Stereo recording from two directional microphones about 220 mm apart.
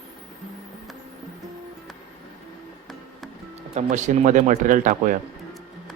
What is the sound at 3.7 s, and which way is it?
Speech, 35° right (ahead or behind).